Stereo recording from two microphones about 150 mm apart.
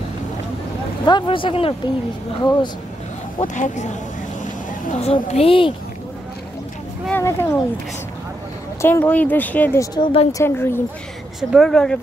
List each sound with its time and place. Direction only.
1.0 s a woman's voice: 30° left (ahead or behind)
3.3 s speech: 55° left (ahead or behind)
5.0 s a woman's voice: 40° left (ahead or behind)
7.1 s speech: 15° left (ahead or behind)
8.8 s speech: 10° left (ahead or behind)
9.9 s a woman's voice: 30° left (ahead or behind)
10.4 s speech: 15° left (ahead or behind)
11.5 s speech: 5° left (ahead or behind)